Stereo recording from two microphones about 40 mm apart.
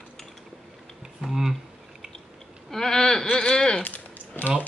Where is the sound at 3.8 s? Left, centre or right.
Left.